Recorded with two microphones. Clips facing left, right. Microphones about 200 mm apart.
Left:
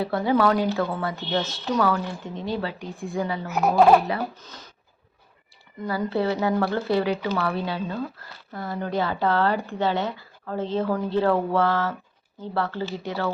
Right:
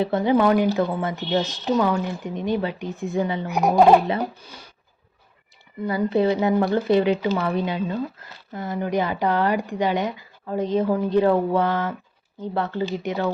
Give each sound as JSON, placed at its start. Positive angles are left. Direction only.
{"t": 0.0, "sound": "speech", "side_deg": -20}
{"t": 5.9, "sound": "speech", "side_deg": -20}